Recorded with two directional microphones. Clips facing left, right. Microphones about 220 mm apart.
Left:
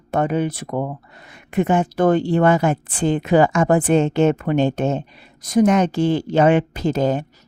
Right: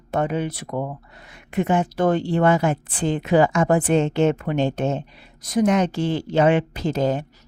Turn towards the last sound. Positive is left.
turn(degrees=50)  # may be behind; listen again after turning